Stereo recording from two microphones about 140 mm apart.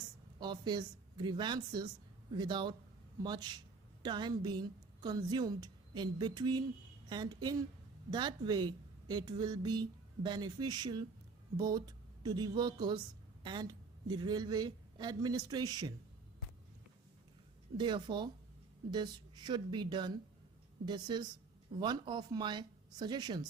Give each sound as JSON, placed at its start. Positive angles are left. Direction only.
{"t": 0.3, "sound": "a woman's voice", "side_deg": -30}
{"t": 17.7, "sound": "a woman's voice", "side_deg": -35}